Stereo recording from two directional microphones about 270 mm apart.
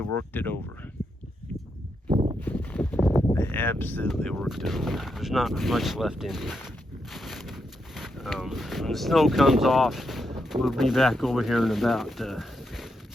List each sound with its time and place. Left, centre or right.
0.3 s speech: centre
2.0 s a sound: centre
2.4 s speech: centre